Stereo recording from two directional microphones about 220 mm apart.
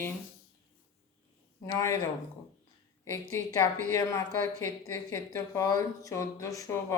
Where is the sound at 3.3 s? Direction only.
15° left (ahead or behind).